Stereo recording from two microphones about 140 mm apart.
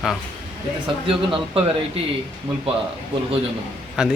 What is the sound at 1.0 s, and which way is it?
Speech, 40° right (ahead or behind).